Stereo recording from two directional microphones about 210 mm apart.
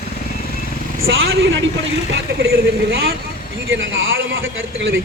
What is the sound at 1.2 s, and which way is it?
Speech, 65° right (ahead or behind).